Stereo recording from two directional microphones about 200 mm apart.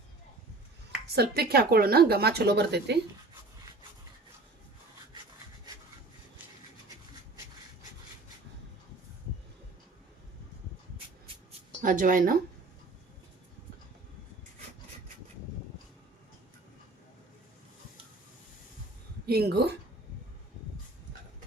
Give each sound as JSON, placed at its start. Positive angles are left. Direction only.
{"t": 1.0, "sound": "speech", "side_deg": -55}
{"t": 11.8, "sound": "speech", "side_deg": -45}
{"t": 19.2, "sound": "speech", "side_deg": -50}